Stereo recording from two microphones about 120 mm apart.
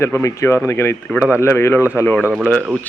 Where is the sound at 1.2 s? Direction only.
10° right (ahead or behind).